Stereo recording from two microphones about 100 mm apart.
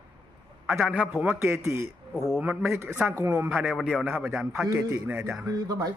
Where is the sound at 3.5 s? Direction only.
10° right (ahead or behind).